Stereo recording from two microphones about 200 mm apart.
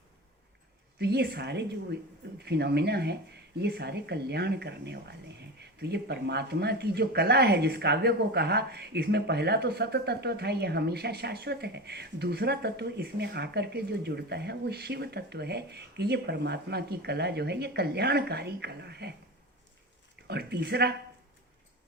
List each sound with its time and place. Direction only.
0.9 s speech: 55° right (ahead or behind)
20.2 s speech: 55° right (ahead or behind)